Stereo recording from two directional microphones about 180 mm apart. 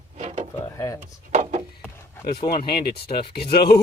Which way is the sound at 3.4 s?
60° left (ahead or behind).